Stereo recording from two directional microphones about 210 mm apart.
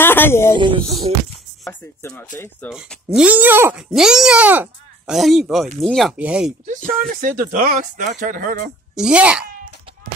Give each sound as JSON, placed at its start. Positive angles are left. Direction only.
{"t": 0.0, "sound": "speech", "side_deg": 10}
{"t": 0.6, "sound": "speech", "side_deg": -25}
{"t": 1.6, "sound": "chopping", "side_deg": 10}
{"t": 2.7, "sound": "speech", "side_deg": -5}
{"t": 6.9, "sound": "speech", "side_deg": -40}
{"t": 8.9, "sound": "speech", "side_deg": -5}